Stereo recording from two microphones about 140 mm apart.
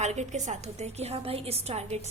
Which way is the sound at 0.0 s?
55° right (ahead or behind).